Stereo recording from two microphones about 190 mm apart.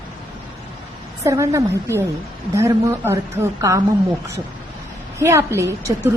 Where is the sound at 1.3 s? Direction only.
15° right (ahead or behind).